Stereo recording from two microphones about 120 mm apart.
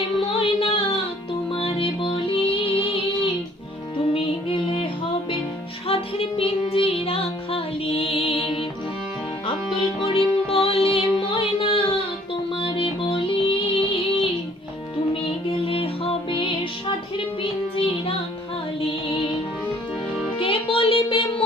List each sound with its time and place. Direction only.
0.2 s music: 50° left (ahead or behind)
5.9 s music: 50° left (ahead or behind)
10.0 s music: 45° left (ahead or behind)
20.4 s music: 50° left (ahead or behind)